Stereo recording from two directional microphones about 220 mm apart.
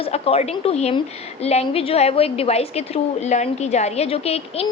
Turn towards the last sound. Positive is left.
turn(degrees=25)  # may be behind; listen again after turning